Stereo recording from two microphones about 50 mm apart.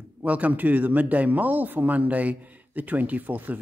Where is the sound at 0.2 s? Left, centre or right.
Right.